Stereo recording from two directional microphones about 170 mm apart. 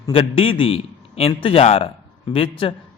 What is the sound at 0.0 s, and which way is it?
A man's voice, 30° left (ahead or behind).